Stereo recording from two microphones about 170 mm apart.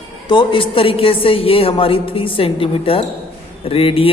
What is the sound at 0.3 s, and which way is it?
A woman's voice, 30° left (ahead or behind).